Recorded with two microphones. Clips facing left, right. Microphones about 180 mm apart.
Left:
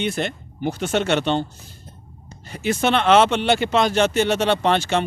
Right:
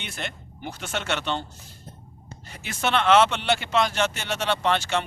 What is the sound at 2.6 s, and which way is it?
Speech, 20° left (ahead or behind).